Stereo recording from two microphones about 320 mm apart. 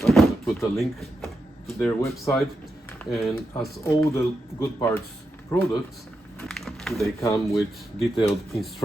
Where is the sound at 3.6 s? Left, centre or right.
Centre.